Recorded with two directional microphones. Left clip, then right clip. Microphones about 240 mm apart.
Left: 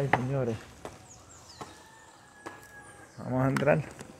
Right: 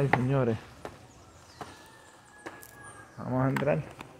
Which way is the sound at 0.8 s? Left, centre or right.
Centre.